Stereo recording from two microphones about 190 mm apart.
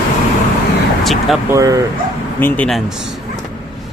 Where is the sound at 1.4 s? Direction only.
15° right (ahead or behind).